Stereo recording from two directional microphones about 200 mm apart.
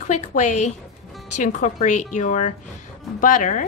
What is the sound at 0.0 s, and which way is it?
A woman's voice, 40° left (ahead or behind).